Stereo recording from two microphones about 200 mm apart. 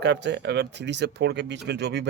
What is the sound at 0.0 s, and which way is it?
Speech, 60° right (ahead or behind).